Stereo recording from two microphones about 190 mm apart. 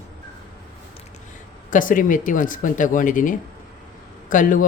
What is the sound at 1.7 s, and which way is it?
Speech, 45° left (ahead or behind).